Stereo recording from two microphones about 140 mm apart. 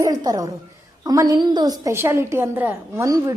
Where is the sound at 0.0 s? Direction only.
30° right (ahead or behind).